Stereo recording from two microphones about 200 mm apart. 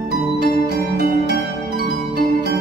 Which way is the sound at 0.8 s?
50° right (ahead or behind).